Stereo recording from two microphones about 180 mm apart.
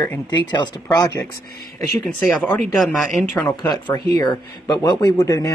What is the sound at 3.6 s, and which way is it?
A man's voice, 20° left (ahead or behind).